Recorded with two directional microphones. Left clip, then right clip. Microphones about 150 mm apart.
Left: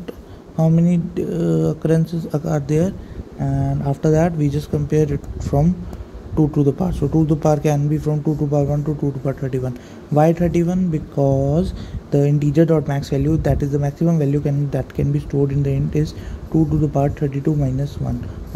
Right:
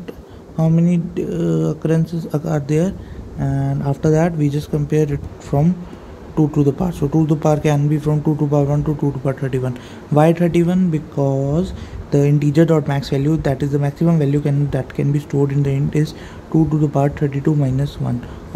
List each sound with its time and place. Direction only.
0.6 s a man's voice: centre (ahead or behind)
0.8 s speech: 10° left (ahead or behind)
2.0 s a man's voice: centre (ahead or behind)
3.3 s a man's voice: 15° right (ahead or behind)
11.1 s a man's voice: 5° left (ahead or behind)